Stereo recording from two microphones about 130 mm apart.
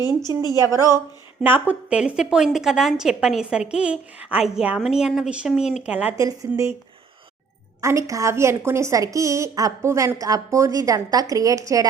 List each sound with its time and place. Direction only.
0.4 s a woman's voice: 25° left (ahead or behind)
1.4 s a woman's voice: 15° right (ahead or behind)
6.1 s a woman's voice: 25° right (ahead or behind)
7.8 s a woman's voice: 20° right (ahead or behind)